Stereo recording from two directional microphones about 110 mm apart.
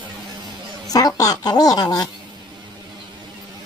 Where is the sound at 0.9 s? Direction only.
35° left (ahead or behind).